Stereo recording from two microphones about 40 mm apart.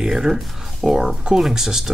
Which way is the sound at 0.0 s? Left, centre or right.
Centre.